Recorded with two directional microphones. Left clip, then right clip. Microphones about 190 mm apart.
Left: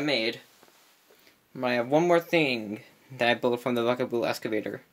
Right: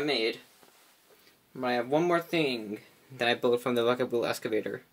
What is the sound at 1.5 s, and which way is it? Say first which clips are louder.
Speech: left 3 dB; 35° left (ahead or behind).